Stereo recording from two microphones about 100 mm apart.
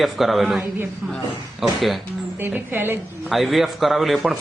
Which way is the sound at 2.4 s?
20° right (ahead or behind).